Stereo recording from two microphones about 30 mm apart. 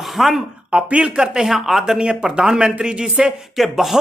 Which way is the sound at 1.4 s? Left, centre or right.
Centre.